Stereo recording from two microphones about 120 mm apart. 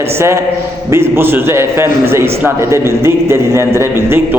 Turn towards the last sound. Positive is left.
turn(degrees=-20)  # may be behind; listen again after turning